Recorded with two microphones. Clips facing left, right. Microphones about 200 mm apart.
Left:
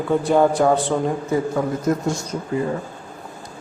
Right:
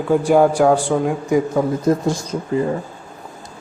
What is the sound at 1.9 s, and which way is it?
Speech, 30° right (ahead or behind).